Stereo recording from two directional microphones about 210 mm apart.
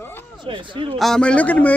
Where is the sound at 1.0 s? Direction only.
5° left (ahead or behind).